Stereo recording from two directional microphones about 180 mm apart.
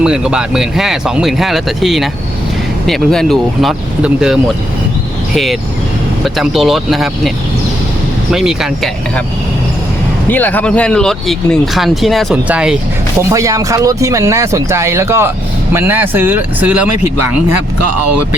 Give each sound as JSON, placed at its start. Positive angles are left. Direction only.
{"t": 0.0, "sound": "speech", "side_deg": -5}
{"t": 10.2, "sound": "speech", "side_deg": 10}
{"t": 13.3, "sound": "speech", "side_deg": -20}